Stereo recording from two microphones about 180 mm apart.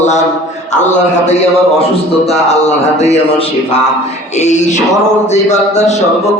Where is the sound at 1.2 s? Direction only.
40° left (ahead or behind).